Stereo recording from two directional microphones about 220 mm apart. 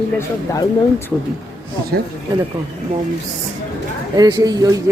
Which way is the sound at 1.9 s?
45° right (ahead or behind).